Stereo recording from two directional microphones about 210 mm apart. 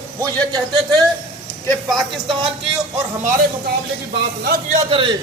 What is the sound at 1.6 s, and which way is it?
Speech, centre (ahead or behind).